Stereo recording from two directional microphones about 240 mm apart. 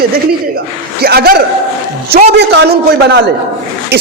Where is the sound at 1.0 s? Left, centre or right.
Right.